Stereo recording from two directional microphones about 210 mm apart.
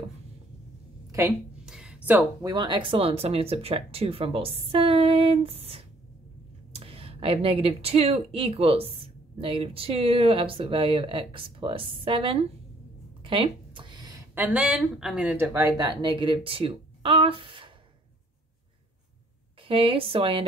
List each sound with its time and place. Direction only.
1.1 s a sound: 5° right (ahead or behind)
2.5 s speech: 20° right (ahead or behind)
19.7 s speech: 25° right (ahead or behind)